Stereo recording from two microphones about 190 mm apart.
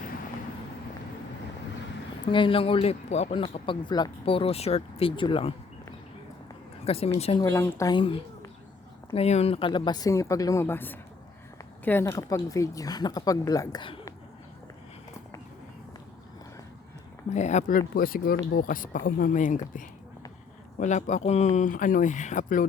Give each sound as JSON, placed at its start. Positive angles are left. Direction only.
{"t": 2.3, "sound": "speech", "side_deg": 25}
{"t": 6.8, "sound": "a woman's voice", "side_deg": 30}
{"t": 7.4, "sound": "speech", "side_deg": 15}
{"t": 9.0, "sound": "speech", "side_deg": 35}
{"t": 17.2, "sound": "speech", "side_deg": 40}